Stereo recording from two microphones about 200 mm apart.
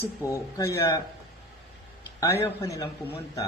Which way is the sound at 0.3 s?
15° left (ahead or behind).